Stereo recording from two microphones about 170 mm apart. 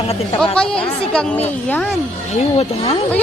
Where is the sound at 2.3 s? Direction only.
35° left (ahead or behind).